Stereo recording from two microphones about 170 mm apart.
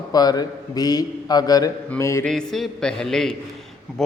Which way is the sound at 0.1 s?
20° left (ahead or behind).